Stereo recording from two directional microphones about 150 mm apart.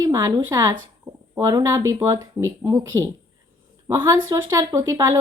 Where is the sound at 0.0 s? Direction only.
20° right (ahead or behind).